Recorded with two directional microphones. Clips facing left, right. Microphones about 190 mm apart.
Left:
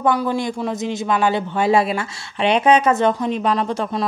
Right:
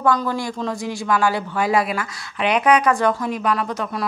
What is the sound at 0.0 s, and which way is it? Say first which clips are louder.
A man's voice: left 2 dB; 15° left (ahead or behind).